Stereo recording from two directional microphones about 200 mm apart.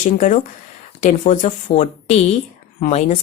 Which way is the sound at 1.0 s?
35° left (ahead or behind).